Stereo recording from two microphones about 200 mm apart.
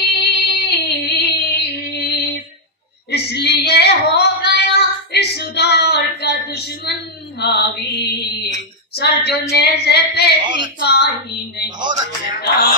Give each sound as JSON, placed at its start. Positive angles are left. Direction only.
{"t": 0.2, "sound": "female singing", "side_deg": 55}
{"t": 3.1, "sound": "child singing", "side_deg": 55}
{"t": 7.3, "sound": "mantra", "side_deg": 55}
{"t": 8.9, "sound": "female singing", "side_deg": 55}
{"t": 9.5, "sound": "child singing", "side_deg": 55}
{"t": 10.4, "sound": "a sound", "side_deg": -25}
{"t": 10.8, "sound": "a sound", "side_deg": 55}
{"t": 12.3, "sound": "music", "side_deg": 45}